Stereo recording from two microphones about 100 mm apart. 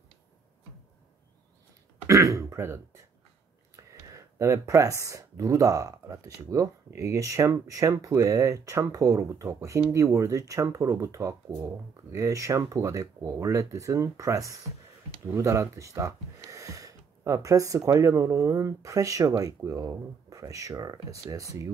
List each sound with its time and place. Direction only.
2.0 s speech: 30° right (ahead or behind)